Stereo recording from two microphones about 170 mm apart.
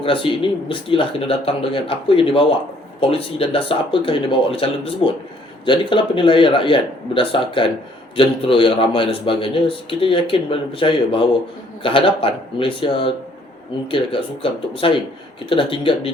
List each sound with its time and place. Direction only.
0.0 s a man's voice: 30° left (ahead or behind)